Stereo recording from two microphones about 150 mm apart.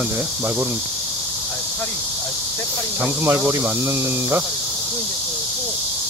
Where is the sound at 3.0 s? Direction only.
15° right (ahead or behind).